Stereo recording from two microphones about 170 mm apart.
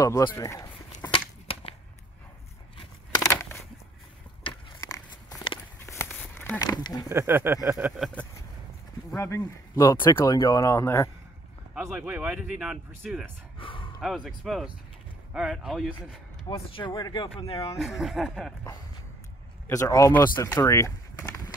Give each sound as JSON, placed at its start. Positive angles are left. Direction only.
{"t": 0.0, "sound": "speech", "side_deg": 20}
{"t": 1.5, "sound": "whip", "side_deg": 35}
{"t": 2.8, "sound": "a sound", "side_deg": 20}
{"t": 4.7, "sound": "walk", "side_deg": 20}
{"t": 6.3, "sound": "a sound", "side_deg": 10}
{"t": 6.6, "sound": "speech", "side_deg": 25}
{"t": 7.1, "sound": "speech", "side_deg": -15}
{"t": 8.0, "sound": "speech", "side_deg": 10}
{"t": 11.7, "sound": "speech", "side_deg": -5}
{"t": 13.6, "sound": "a sound", "side_deg": 30}
{"t": 14.0, "sound": "speech", "side_deg": 0}
{"t": 16.4, "sound": "speech", "side_deg": 30}
{"t": 17.7, "sound": "speech", "side_deg": 0}
{"t": 19.7, "sound": "speech", "side_deg": 20}